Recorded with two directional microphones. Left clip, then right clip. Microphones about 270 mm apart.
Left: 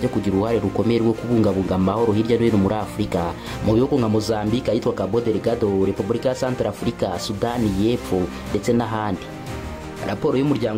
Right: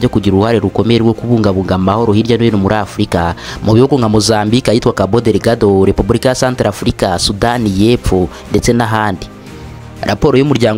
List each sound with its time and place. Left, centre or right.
0.0 s speech: right